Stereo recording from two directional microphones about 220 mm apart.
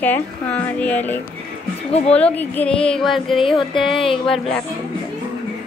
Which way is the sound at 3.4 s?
25° left (ahead or behind).